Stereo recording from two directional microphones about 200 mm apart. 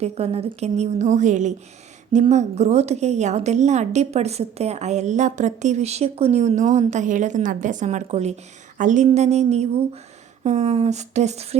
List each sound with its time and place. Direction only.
0.0 s a woman's voice: 30° right (ahead or behind)